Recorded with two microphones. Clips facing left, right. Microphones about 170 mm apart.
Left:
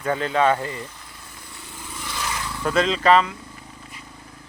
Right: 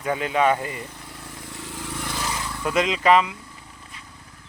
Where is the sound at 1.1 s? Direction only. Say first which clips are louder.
Right 6 dB; 90° right.